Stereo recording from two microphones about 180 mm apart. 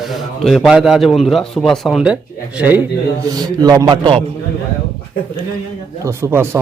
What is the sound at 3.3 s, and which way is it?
A man's voice, 20° right (ahead or behind).